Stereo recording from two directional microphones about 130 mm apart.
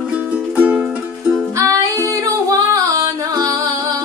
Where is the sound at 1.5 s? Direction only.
25° right (ahead or behind).